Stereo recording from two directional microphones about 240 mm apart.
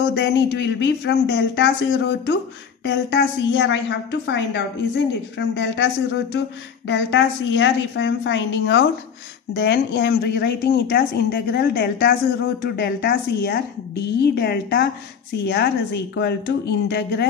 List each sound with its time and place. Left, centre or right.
0.1 s speech: left